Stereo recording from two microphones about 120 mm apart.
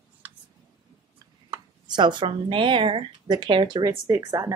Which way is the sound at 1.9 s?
40° right (ahead or behind).